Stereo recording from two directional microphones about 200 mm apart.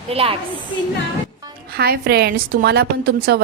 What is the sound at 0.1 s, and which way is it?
Speech, 30° right (ahead or behind).